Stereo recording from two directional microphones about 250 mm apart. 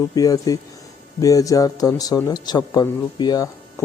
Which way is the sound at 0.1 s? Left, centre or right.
Centre.